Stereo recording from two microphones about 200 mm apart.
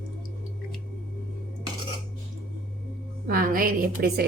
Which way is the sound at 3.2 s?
45° right (ahead or behind).